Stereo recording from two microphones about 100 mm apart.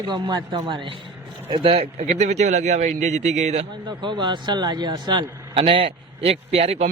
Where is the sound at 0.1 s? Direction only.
45° right (ahead or behind).